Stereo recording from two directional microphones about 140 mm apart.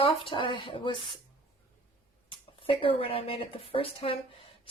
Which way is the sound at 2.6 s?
40° left (ahead or behind).